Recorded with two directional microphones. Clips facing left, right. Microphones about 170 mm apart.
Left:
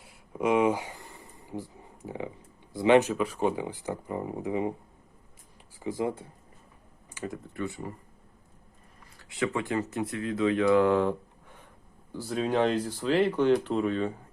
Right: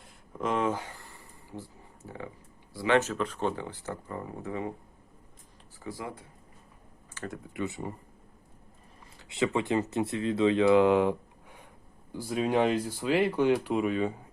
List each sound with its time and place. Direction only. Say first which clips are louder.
0.0 s a sound: left 5 dB; 10° left (ahead or behind)
2.7 s speech: left 5 dB; 20° left (ahead or behind)
5.8 s speech: left 8 dB; 20° left (ahead or behind)
7.4 s speech: even; 15° right (ahead or behind)
9.1 s speech: right 2 dB; 25° right (ahead or behind)